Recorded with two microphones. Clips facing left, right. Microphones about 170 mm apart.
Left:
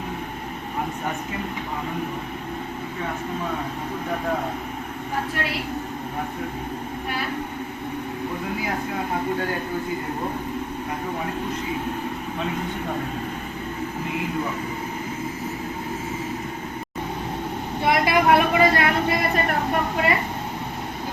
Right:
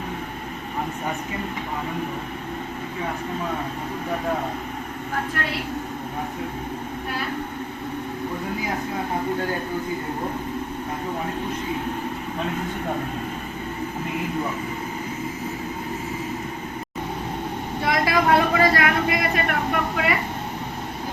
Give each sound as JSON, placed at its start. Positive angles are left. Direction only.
{"t": 17.8, "sound": "vehicle", "side_deg": 20}